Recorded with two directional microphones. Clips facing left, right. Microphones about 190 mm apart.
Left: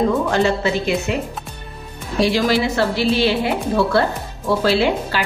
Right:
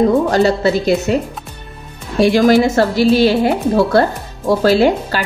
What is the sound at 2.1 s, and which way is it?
A woman's voice, 50° right (ahead or behind).